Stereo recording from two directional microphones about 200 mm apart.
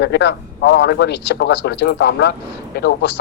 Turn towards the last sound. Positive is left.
turn(degrees=55)  # may be behind; listen again after turning